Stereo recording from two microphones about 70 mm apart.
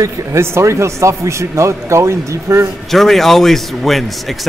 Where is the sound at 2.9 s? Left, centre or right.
Centre.